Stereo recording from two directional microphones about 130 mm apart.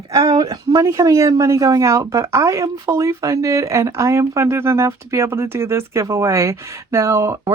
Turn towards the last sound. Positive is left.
turn(degrees=-20)  # may be behind; listen again after turning